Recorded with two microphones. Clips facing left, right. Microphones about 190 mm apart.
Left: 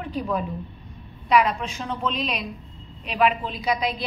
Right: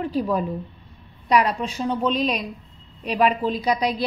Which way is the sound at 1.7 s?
40° right (ahead or behind).